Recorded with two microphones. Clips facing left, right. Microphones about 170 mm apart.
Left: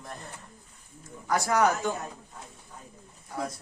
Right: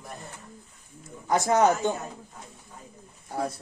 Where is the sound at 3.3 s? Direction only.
30° right (ahead or behind).